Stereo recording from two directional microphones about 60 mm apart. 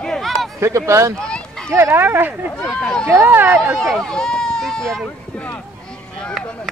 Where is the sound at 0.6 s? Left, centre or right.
Right.